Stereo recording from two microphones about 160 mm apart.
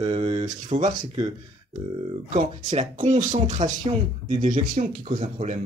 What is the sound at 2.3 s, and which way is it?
Speech, 45° right (ahead or behind).